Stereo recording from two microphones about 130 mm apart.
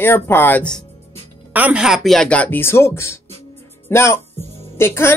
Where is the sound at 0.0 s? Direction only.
15° left (ahead or behind).